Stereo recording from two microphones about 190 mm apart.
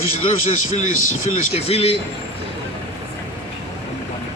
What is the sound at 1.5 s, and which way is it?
Speech, 30° left (ahead or behind).